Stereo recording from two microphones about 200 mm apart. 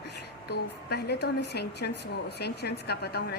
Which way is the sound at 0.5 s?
55° left (ahead or behind).